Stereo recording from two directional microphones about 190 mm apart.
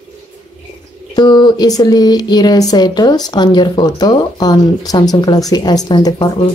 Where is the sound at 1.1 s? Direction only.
20° left (ahead or behind).